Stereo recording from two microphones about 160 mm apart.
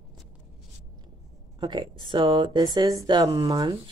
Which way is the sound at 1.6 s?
30° right (ahead or behind).